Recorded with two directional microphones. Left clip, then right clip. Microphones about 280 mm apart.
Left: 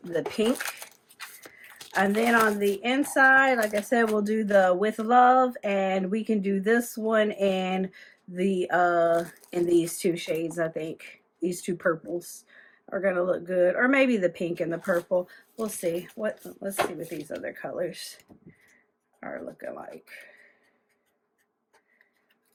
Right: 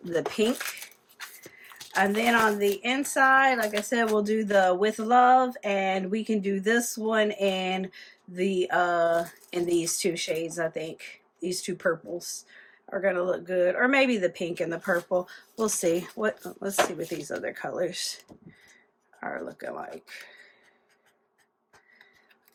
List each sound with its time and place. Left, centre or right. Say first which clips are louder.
0.0 s speech: right 1 dB; centre
1.9 s speech: even; centre
19.2 s speech: right 2 dB; centre